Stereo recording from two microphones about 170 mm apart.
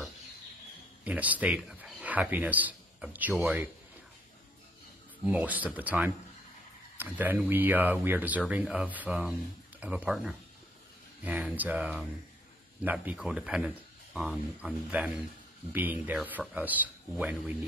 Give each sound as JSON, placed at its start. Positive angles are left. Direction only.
{"t": 1.0, "sound": "speech", "side_deg": -10}
{"t": 5.2, "sound": "speech", "side_deg": -10}